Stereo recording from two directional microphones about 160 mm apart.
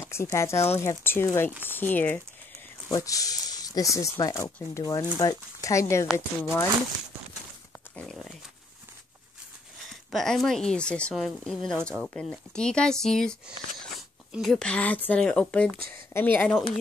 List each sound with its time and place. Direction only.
0.0 s speech: 15° left (ahead or behind)
7.9 s speech: 5° left (ahead or behind)
10.1 s a woman's voice: centre (ahead or behind)